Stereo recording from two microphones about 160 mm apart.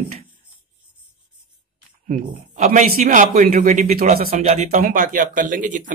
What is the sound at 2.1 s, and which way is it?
Speech, 50° right (ahead or behind).